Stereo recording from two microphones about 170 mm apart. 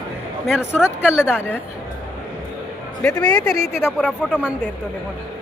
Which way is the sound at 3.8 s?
10° left (ahead or behind).